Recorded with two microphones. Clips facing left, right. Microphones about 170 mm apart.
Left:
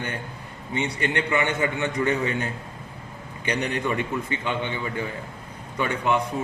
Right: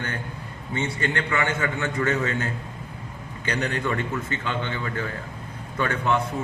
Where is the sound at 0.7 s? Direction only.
20° left (ahead or behind).